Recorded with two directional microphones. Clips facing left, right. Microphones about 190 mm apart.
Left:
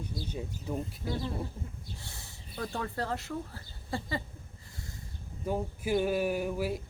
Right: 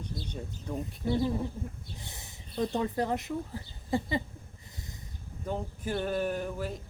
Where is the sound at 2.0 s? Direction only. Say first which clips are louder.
Right 2 dB; 20° right (ahead or behind).